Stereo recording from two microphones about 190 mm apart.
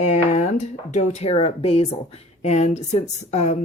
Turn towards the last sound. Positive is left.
turn(degrees=35)  # may be behind; listen again after turning